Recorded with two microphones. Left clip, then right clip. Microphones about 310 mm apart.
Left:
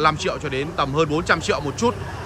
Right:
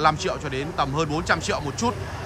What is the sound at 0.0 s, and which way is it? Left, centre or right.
Speech, centre.